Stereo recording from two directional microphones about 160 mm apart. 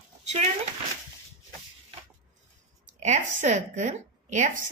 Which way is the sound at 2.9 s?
45° right (ahead or behind).